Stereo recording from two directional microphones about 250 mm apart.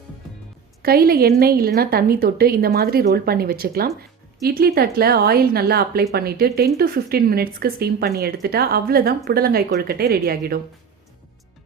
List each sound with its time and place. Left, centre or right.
0.8 s a woman's voice: right